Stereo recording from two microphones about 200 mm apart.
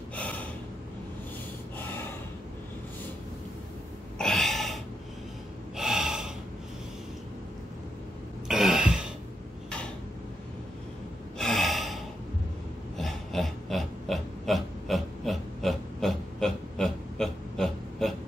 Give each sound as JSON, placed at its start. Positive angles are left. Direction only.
{"t": 4.2, "sound": "gasp", "side_deg": 0}
{"t": 5.8, "sound": "gasp", "side_deg": 0}
{"t": 8.5, "sound": "throat clearing", "side_deg": 0}
{"t": 11.3, "sound": "gasp", "side_deg": 0}
{"t": 12.9, "sound": "pig", "side_deg": 0}